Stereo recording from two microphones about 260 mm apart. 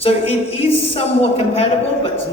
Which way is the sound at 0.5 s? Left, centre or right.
Left.